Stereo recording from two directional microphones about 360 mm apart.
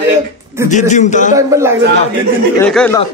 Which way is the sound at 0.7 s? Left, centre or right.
Centre.